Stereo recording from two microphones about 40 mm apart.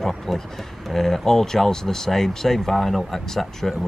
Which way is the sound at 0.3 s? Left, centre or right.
Centre.